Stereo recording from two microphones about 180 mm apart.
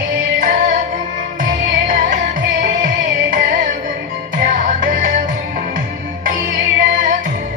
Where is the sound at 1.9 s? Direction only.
45° right (ahead or behind).